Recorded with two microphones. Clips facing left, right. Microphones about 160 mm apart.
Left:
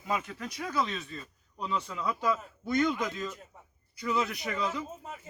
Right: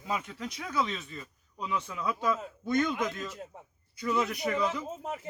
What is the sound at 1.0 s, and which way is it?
Speech, 15° right (ahead or behind).